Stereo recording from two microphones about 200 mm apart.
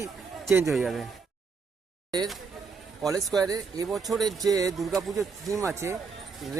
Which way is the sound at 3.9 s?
Centre (ahead or behind).